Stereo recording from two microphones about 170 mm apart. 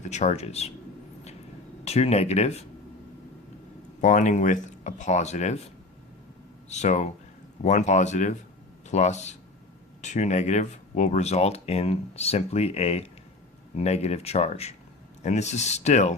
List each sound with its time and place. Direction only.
0.0 s speech: 40° left (ahead or behind)
1.8 s speech: 40° left (ahead or behind)
4.0 s speech: 45° left (ahead or behind)
6.7 s speech: 45° left (ahead or behind)